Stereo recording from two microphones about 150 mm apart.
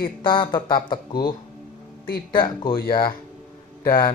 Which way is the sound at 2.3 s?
30° left (ahead or behind).